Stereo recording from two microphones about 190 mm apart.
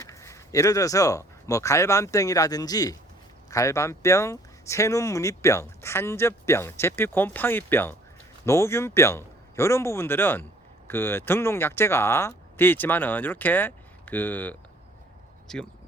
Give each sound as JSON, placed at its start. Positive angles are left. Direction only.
{"t": 0.0, "sound": "speech", "side_deg": 15}